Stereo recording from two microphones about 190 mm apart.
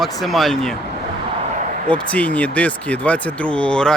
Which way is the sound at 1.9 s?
5° left (ahead or behind).